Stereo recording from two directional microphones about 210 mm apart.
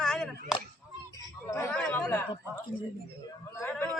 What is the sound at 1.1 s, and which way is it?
Chatter, 15° left (ahead or behind).